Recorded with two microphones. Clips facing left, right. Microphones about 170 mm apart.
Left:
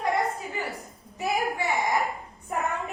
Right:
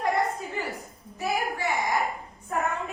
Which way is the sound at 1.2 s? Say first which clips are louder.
Left 1 dB; 20° left (ahead or behind).